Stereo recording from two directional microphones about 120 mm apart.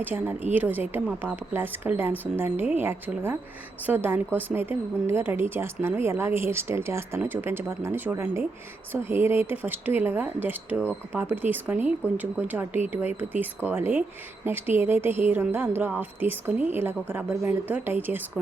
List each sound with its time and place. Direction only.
0.0 s a woman's voice: 15° right (ahead or behind)